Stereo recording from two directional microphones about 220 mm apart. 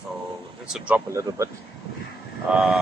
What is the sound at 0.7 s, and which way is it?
Speech, 5° right (ahead or behind).